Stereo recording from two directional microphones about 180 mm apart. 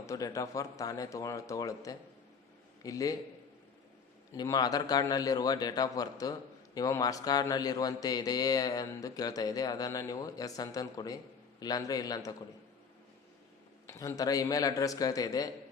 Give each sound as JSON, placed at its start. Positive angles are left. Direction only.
{"t": 0.0, "sound": "a man's voice", "side_deg": 15}
{"t": 4.4, "sound": "a man's voice", "side_deg": 20}
{"t": 13.8, "sound": "a man's voice", "side_deg": 20}